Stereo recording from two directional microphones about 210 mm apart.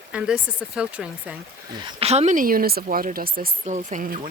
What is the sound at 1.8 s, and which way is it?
Speech, 30° right (ahead or behind).